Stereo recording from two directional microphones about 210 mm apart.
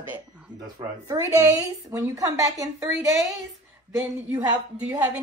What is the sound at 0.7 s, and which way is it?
A woman's voice, 15° right (ahead or behind).